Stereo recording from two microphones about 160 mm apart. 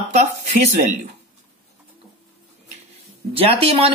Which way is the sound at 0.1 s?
45° right (ahead or behind).